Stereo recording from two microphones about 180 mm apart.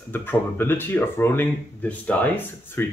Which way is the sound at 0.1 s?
10° left (ahead or behind).